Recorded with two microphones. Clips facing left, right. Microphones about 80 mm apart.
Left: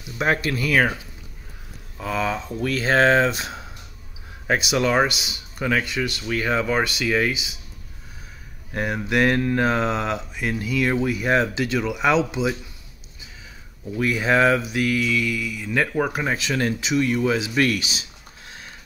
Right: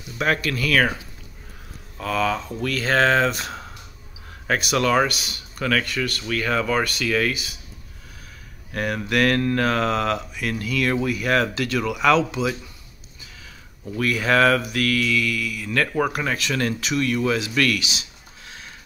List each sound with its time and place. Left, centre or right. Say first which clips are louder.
0.2 s speech: left 1 dB; left
2.0 s speech: right 2 dB; centre
8.7 s speech: even; left
13.9 s speech: even; left